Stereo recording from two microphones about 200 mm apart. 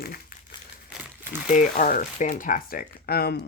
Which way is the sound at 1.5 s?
40° left (ahead or behind).